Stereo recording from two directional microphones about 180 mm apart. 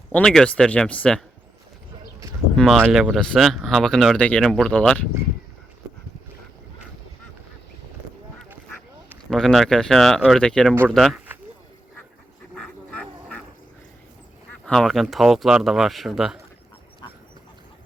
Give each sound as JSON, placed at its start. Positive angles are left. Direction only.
{"t": 0.1, "sound": "speech", "side_deg": 5}
{"t": 2.6, "sound": "speech", "side_deg": 5}
{"t": 9.3, "sound": "speech", "side_deg": 0}
{"t": 12.5, "sound": "duck", "side_deg": 5}
{"t": 14.7, "sound": "speech", "side_deg": 0}
{"t": 17.0, "sound": "duck", "side_deg": 25}